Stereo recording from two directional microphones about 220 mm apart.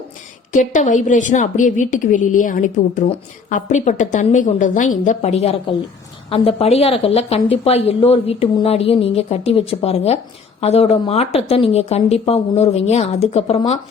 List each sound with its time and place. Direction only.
0.5 s a woman's voice: 35° left (ahead or behind)